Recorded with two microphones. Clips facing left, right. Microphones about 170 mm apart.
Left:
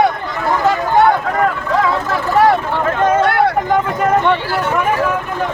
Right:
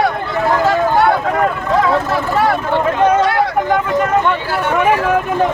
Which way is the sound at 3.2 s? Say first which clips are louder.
Left 1 dB; 60° left (ahead or behind).